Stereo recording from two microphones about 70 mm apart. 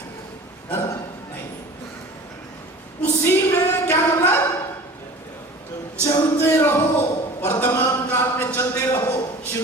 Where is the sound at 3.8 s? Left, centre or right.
Left.